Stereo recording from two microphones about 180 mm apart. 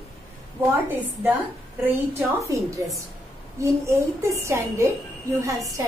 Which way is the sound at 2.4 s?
15° right (ahead or behind).